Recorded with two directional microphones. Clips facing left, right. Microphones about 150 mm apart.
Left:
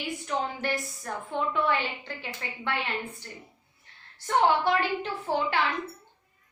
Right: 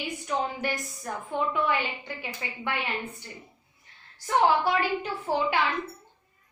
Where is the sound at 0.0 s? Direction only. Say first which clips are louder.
Right 1 dB; 15° right (ahead or behind).